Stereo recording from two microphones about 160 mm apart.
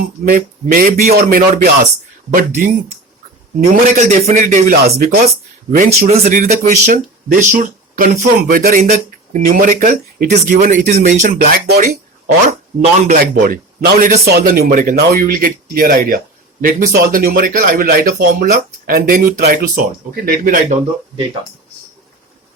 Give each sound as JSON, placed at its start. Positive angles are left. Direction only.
{"t": 0.0, "sound": "speech", "side_deg": -65}
{"t": 3.8, "sound": "speech", "side_deg": -50}
{"t": 4.7, "sound": "speech", "side_deg": -65}
{"t": 5.7, "sound": "speech", "side_deg": -55}
{"t": 12.5, "sound": "speech", "side_deg": -50}
{"t": 13.4, "sound": "speech", "side_deg": -75}